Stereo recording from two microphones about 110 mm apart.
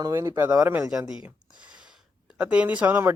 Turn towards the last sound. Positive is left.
turn(degrees=-15)  # may be behind; listen again after turning